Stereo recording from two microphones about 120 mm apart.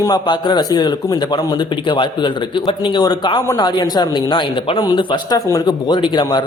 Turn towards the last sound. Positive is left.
turn(degrees=40)  # may be behind; listen again after turning